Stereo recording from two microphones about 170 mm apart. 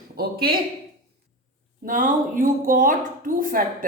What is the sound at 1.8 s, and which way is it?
Speech, 50° right (ahead or behind).